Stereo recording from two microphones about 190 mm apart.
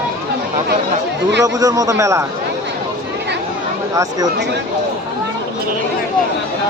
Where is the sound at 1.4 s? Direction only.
20° right (ahead or behind).